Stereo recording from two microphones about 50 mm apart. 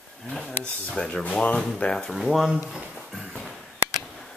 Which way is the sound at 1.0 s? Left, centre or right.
Left.